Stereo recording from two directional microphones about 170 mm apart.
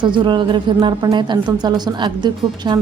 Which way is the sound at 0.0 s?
30° right (ahead or behind).